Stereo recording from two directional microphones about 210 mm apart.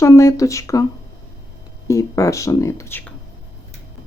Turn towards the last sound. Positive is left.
turn(degrees=10)  # may be behind; listen again after turning